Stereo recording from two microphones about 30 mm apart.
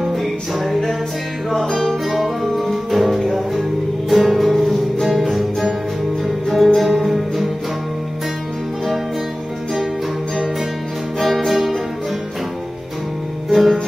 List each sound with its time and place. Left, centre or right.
0.0 s music: centre
6.5 s music: centre
11.1 s music: centre
13.5 s music: centre